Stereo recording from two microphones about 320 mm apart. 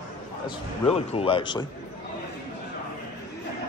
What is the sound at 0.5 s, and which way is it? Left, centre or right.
A man's voice, centre.